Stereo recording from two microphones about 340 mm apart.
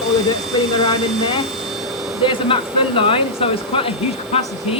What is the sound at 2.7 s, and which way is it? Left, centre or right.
Speech, centre.